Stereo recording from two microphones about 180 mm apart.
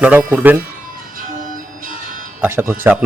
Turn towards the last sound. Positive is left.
turn(degrees=-10)  # may be behind; listen again after turning